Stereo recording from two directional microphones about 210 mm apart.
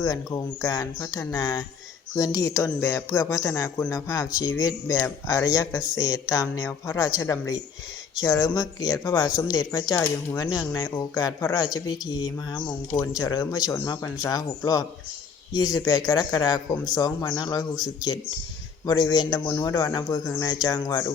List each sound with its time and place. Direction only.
0.0 s speech: 15° left (ahead or behind)